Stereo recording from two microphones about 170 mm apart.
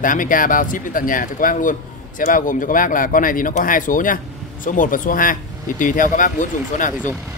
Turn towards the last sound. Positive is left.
turn(degrees=50)  # may be behind; listen again after turning